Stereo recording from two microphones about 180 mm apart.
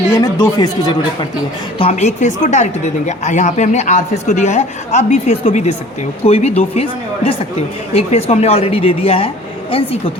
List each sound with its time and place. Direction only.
0.1 s speech: 20° left (ahead or behind)
1.8 s speech: 35° left (ahead or behind)
7.9 s speech: 35° left (ahead or behind)